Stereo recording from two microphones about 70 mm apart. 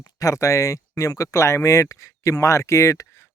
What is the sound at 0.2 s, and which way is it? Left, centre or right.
Speech, left.